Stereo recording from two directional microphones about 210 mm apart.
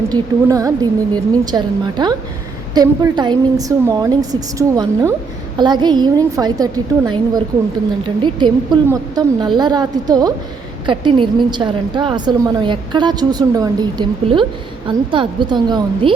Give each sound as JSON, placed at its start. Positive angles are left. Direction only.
{"t": 0.1, "sound": "a woman's voice", "side_deg": -15}